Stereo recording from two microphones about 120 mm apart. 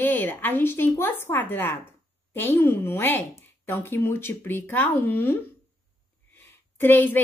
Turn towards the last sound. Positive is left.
turn(degrees=15)  # may be behind; listen again after turning